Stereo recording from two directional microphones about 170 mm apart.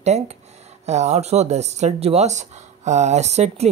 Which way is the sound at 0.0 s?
40° right (ahead or behind).